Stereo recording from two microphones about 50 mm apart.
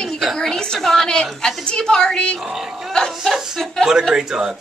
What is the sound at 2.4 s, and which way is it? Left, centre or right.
Speech, centre.